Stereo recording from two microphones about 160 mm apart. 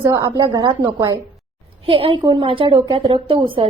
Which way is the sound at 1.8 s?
35° right (ahead or behind).